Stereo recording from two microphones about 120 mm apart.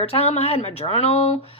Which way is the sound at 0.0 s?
55° left (ahead or behind).